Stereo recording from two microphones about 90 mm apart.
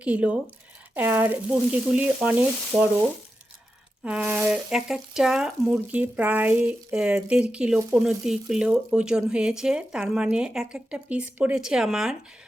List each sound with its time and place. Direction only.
0.0 s speech: 15° right (ahead or behind)
5.7 s speech: 15° right (ahead or behind)